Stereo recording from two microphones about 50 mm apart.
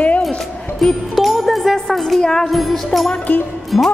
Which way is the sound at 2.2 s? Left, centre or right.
Centre.